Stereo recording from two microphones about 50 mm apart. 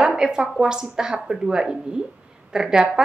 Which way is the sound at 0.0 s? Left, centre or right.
Centre.